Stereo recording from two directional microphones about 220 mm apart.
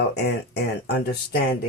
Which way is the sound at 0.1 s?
50° left (ahead or behind).